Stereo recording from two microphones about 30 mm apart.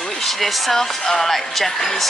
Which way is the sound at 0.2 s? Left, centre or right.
Centre.